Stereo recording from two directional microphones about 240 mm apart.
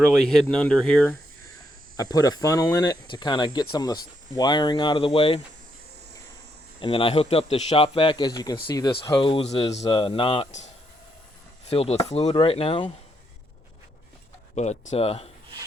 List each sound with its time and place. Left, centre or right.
0.1 s speech: centre
2.0 s speech: centre
6.8 s speech: left
11.7 s speech: left
14.5 s speech: left